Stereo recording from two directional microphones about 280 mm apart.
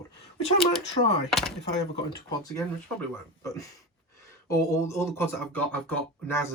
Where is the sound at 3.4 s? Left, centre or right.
Centre.